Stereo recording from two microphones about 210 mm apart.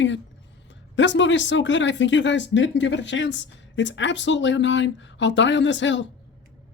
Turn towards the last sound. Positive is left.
turn(degrees=60)  # may be behind; listen again after turning